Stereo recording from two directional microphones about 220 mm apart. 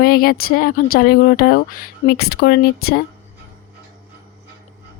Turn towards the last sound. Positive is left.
turn(degrees=45)  # may be behind; listen again after turning